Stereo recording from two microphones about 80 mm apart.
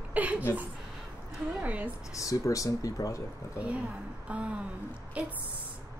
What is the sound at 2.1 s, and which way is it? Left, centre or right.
Speech, left.